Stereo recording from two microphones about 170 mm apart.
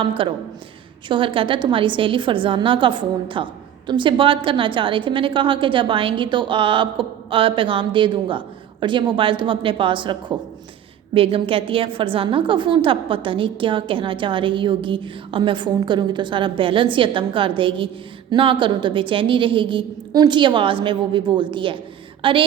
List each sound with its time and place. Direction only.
0.0 s a woman's voice: 30° right (ahead or behind)